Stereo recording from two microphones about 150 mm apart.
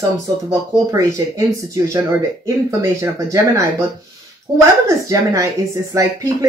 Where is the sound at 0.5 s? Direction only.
20° right (ahead or behind).